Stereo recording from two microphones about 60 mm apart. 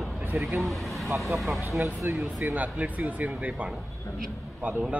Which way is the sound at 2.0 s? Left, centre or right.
Right.